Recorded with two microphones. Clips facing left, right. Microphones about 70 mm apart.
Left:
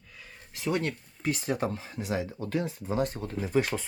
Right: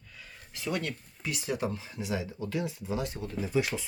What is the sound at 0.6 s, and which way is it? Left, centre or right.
Speech, left.